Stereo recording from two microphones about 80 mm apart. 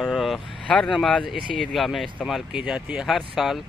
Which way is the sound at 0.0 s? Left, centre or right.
Centre.